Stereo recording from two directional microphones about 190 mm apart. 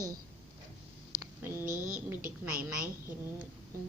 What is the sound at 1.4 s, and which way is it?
Speech, 10° right (ahead or behind).